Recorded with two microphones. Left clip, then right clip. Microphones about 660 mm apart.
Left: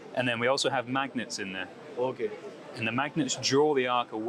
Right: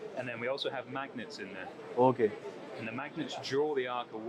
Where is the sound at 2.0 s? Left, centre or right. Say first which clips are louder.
Right 4 dB; right.